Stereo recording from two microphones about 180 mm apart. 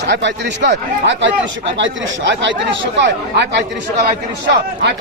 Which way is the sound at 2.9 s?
70° right (ahead or behind).